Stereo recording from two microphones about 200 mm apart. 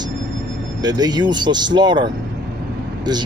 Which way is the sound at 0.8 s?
20° right (ahead or behind).